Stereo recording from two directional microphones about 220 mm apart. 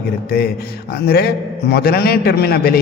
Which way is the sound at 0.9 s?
45° left (ahead or behind).